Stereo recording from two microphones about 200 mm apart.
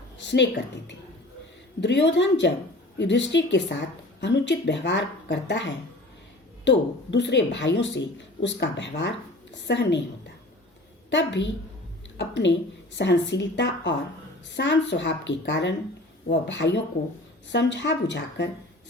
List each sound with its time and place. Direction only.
0.2 s speech: 60° left (ahead or behind)
6.7 s speech: 60° left (ahead or behind)
11.1 s a woman's voice: 65° left (ahead or behind)